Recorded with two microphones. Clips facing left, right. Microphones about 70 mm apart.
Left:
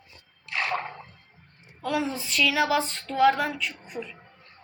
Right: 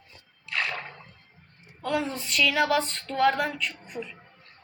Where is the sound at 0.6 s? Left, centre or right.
Left.